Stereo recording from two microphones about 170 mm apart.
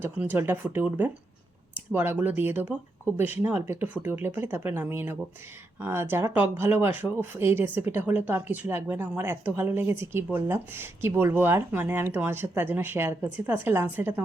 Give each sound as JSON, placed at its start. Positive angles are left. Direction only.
{"t": 0.0, "sound": "speech", "side_deg": -10}